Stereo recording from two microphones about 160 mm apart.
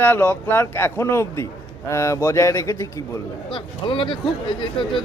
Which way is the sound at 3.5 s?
30° left (ahead or behind).